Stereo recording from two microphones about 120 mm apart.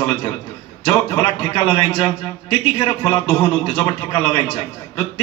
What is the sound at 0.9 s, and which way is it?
A man's voice, 45° left (ahead or behind).